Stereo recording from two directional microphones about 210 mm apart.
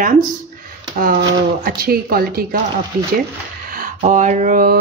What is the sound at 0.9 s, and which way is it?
Speech, 45° right (ahead or behind).